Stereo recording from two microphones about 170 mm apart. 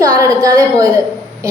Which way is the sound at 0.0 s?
20° right (ahead or behind).